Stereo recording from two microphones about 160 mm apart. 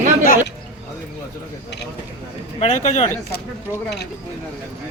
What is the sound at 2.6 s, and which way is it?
Speech, 45° left (ahead or behind).